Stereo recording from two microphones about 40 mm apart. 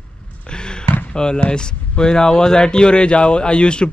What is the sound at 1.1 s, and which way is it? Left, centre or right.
Speech, centre.